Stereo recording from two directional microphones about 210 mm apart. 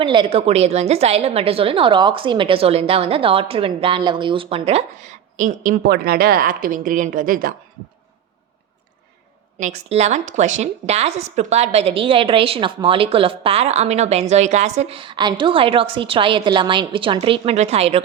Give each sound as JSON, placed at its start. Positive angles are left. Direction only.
{"t": 0.0, "sound": "a woman's voice", "side_deg": -25}
{"t": 9.6, "sound": "a woman's voice", "side_deg": -35}